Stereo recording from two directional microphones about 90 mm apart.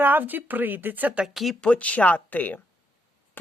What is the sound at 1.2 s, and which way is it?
Speech, centre (ahead or behind).